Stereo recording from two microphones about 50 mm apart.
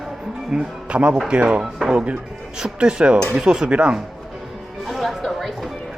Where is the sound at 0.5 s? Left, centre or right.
Centre.